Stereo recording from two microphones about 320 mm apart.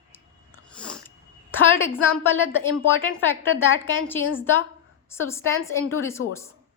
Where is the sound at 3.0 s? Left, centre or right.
Centre.